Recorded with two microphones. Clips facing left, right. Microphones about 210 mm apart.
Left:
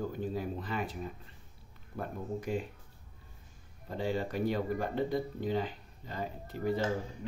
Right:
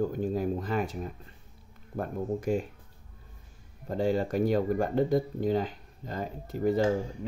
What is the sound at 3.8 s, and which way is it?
Speech, 45° right (ahead or behind).